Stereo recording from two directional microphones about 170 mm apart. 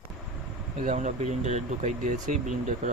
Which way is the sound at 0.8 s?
40° right (ahead or behind).